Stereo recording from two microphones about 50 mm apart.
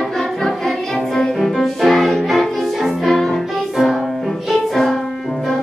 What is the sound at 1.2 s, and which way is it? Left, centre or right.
Music, centre.